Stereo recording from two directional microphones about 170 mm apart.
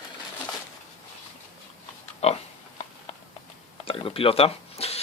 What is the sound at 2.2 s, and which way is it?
Pig, 35° left (ahead or behind).